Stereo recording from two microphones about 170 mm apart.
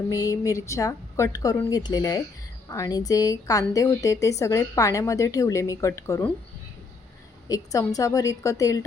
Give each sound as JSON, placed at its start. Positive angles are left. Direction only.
{"t": 0.1, "sound": "a woman's voice", "side_deg": 20}
{"t": 7.4, "sound": "a woman's voice", "side_deg": 20}